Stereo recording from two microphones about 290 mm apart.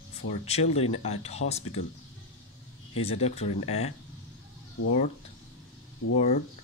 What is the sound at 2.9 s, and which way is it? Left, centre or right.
Speech, left.